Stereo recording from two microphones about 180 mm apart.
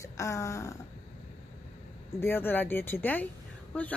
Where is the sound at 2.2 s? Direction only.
10° left (ahead or behind).